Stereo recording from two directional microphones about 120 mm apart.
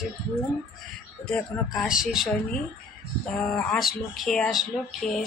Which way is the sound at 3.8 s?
Centre (ahead or behind).